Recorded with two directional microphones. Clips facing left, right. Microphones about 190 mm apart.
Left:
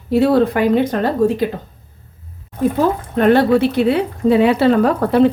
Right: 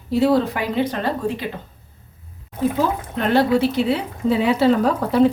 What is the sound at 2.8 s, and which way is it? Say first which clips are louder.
Speech: left 8 dB; 55° left (ahead or behind).